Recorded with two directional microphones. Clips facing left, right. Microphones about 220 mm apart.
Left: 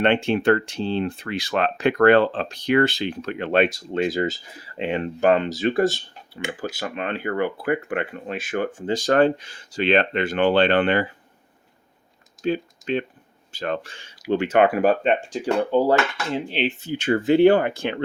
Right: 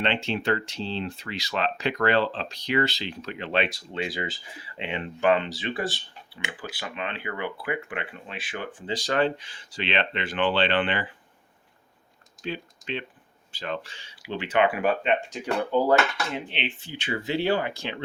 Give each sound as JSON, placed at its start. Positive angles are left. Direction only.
{"t": 0.0, "sound": "speech", "side_deg": 50}
{"t": 12.4, "sound": "typing", "side_deg": 45}
{"t": 13.5, "sound": "speech", "side_deg": 45}